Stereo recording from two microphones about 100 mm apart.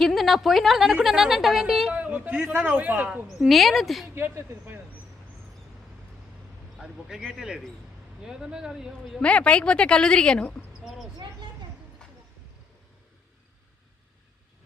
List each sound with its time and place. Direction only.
0.0 s a woman's voice: centre (ahead or behind)
2.0 s a man's voice: 15° right (ahead or behind)
3.2 s a woman's voice: centre (ahead or behind)
4.1 s speech: 25° right (ahead or behind)
6.7 s a woman's voice: centre (ahead or behind)
9.2 s a woman's voice: 10° left (ahead or behind)
10.8 s a sound: 5° right (ahead or behind)